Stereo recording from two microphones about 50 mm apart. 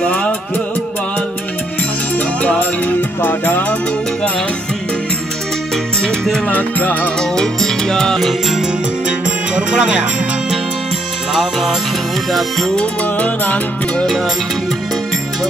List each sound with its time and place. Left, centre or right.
0.0 s music: centre
2.1 s music: left
6.5 s music: left
7.2 s music: centre
8.3 s music: centre
9.6 s speech: right
12.3 s music: centre
12.7 s music: left